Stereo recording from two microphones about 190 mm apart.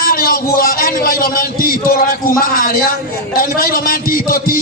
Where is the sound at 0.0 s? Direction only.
50° left (ahead or behind).